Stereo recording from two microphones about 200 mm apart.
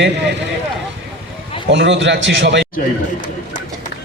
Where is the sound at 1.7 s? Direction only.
65° right (ahead or behind).